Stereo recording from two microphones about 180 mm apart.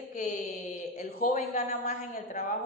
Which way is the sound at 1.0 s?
55° left (ahead or behind).